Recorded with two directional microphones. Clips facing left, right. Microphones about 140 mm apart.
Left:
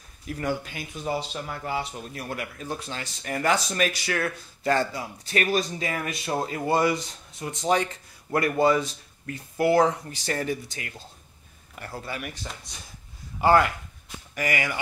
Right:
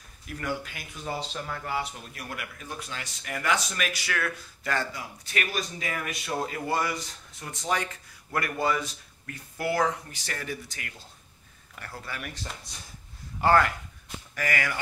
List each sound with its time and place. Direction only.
0.4 s speech: 25° left (ahead or behind)
1.0 s speech: 15° left (ahead or behind)
13.4 s speech: 15° left (ahead or behind)